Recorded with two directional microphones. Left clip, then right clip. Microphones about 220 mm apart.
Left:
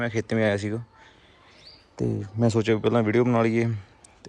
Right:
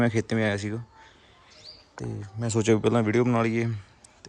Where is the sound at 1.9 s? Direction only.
Centre (ahead or behind).